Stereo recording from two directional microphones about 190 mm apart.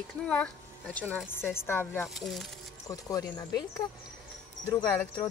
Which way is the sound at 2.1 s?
Centre (ahead or behind).